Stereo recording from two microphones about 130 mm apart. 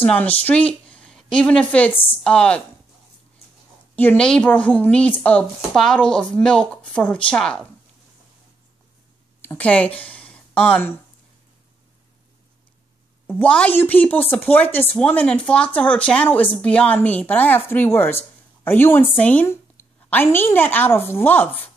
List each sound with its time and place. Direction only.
0.0 s a woman's voice: 10° left (ahead or behind)
3.9 s speech: 15° left (ahead or behind)
9.4 s a woman's voice: 15° left (ahead or behind)
13.4 s speech: 10° left (ahead or behind)